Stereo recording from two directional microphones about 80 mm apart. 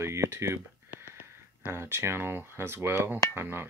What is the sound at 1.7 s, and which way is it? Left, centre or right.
Speech, right.